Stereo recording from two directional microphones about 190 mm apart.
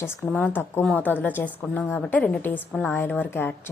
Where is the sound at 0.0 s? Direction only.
5° left (ahead or behind).